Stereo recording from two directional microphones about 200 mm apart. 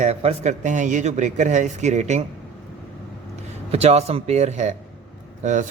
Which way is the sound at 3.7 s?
30° right (ahead or behind).